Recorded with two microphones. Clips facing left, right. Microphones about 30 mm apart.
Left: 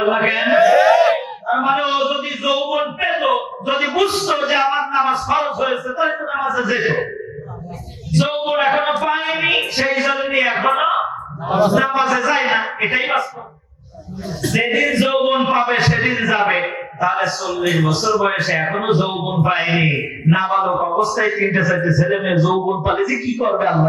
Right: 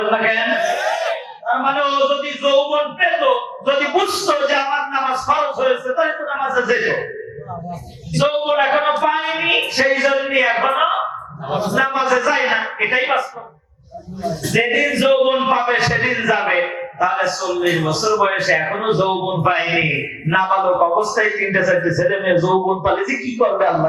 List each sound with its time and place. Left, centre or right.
0.0 s a man's voice: centre
0.5 s a sound: left
1.5 s a man's voice: centre
8.1 s a sound: centre
9.6 s a man's voice: centre
14.5 s a man's voice: centre